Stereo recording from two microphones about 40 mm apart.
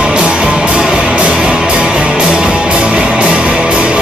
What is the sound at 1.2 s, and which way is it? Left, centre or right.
Music, right.